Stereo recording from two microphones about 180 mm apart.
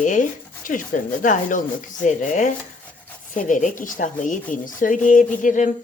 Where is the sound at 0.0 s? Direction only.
45° left (ahead or behind).